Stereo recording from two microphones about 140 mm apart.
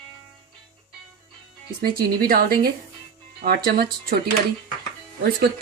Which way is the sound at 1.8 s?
90° right.